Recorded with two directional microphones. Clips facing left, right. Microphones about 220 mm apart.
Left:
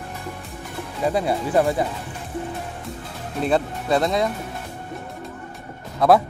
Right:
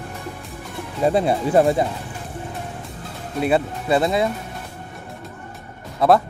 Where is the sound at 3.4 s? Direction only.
5° right (ahead or behind).